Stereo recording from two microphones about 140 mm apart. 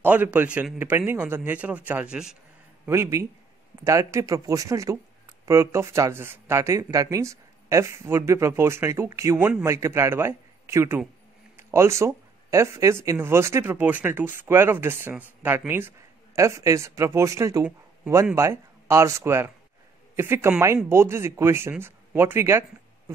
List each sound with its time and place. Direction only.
0.0 s speech: 10° right (ahead or behind)
2.9 s speech: 20° right (ahead or behind)
17.6 s speech: 10° right (ahead or behind)